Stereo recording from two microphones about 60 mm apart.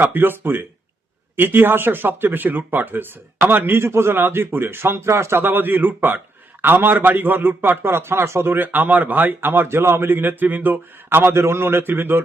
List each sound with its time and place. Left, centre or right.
0.0 s a man's voice: right